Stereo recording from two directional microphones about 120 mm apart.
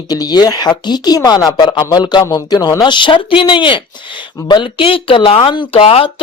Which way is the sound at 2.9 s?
45° left (ahead or behind).